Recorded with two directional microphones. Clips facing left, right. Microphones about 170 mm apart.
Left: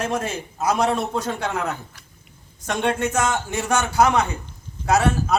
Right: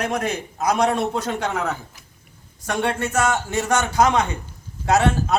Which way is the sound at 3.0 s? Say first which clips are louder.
Right 1 dB; 15° left (ahead or behind).